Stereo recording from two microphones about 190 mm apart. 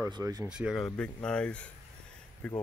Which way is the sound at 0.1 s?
20° right (ahead or behind).